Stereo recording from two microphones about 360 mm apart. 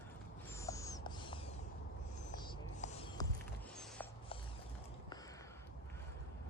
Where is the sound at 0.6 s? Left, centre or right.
Centre.